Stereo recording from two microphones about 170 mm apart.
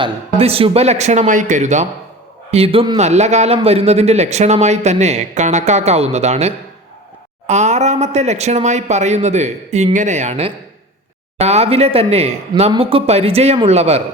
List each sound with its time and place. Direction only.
0.0 s a man's voice: 35° right (ahead or behind)